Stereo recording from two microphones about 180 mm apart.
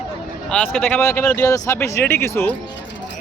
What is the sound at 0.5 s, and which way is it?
Speech, 5° left (ahead or behind).